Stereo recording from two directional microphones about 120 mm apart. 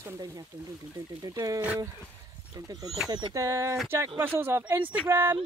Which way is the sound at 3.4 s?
25° right (ahead or behind).